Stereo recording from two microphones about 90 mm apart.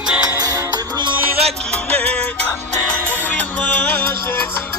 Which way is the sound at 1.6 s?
10° left (ahead or behind).